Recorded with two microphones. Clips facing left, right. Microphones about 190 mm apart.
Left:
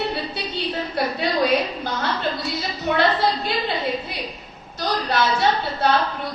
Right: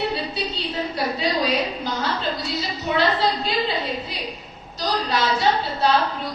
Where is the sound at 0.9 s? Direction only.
55° left (ahead or behind).